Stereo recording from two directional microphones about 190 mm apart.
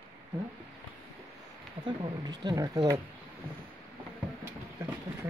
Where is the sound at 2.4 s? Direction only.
20° right (ahead or behind).